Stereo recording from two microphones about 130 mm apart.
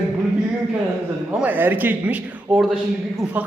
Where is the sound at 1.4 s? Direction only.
15° right (ahead or behind).